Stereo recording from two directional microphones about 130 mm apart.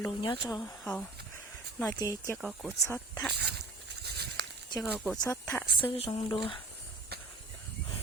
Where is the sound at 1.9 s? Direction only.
25° left (ahead or behind).